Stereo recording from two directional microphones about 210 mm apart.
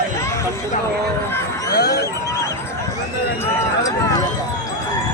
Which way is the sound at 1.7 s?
50° left (ahead or behind).